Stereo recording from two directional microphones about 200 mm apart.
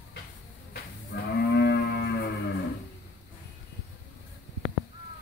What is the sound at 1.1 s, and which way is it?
Moo, 55° left (ahead or behind).